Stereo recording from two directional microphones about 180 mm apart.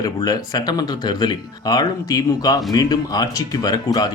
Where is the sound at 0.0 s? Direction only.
20° left (ahead or behind).